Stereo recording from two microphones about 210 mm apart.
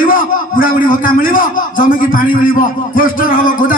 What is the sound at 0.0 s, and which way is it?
A man's voice, 40° left (ahead or behind).